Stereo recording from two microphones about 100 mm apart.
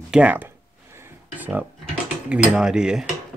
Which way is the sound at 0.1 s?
15° right (ahead or behind).